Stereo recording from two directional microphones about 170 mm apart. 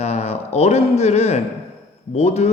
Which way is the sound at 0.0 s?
40° left (ahead or behind).